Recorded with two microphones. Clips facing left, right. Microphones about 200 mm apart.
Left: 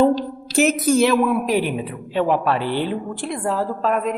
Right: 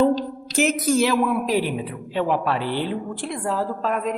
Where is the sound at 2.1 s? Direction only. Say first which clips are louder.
Left 3 dB; 55° left (ahead or behind).